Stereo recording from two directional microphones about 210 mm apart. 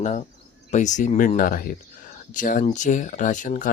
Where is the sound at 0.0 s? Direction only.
35° left (ahead or behind).